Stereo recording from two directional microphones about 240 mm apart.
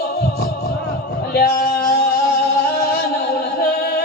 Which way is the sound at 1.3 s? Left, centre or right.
Left.